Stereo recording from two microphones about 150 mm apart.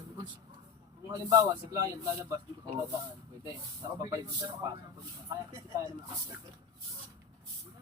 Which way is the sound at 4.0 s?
25° right (ahead or behind).